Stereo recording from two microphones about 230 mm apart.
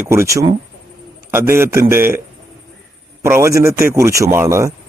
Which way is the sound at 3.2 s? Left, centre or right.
Centre.